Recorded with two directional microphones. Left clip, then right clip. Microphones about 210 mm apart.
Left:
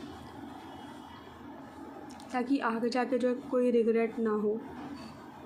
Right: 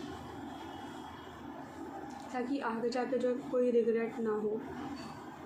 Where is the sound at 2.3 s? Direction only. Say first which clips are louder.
Left 5 dB; 50° left (ahead or behind).